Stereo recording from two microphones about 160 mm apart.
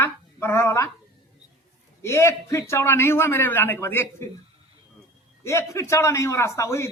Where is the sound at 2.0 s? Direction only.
15° left (ahead or behind).